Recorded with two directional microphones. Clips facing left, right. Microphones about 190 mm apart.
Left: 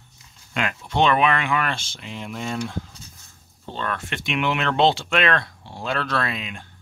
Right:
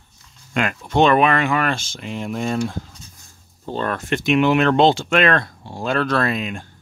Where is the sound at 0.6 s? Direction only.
45° right (ahead or behind).